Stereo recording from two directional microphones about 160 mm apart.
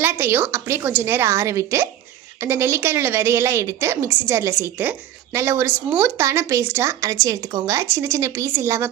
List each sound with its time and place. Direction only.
0.0 s a woman's voice: 15° right (ahead or behind)